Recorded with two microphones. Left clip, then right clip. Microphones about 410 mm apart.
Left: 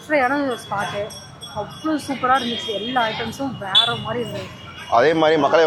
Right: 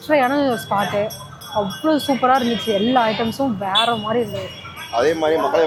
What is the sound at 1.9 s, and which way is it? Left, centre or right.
Speech, right.